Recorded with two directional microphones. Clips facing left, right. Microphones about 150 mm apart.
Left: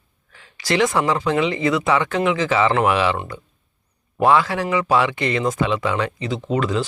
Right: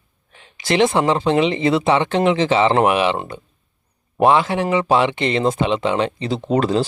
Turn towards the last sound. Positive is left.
turn(degrees=-35)  # may be behind; listen again after turning